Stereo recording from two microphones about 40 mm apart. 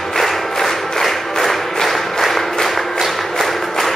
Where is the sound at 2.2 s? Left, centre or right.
Centre.